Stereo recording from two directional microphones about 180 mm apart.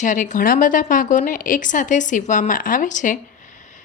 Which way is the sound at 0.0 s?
45° left (ahead or behind).